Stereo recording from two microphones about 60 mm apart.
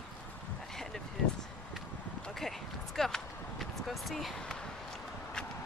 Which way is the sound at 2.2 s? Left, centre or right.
Centre.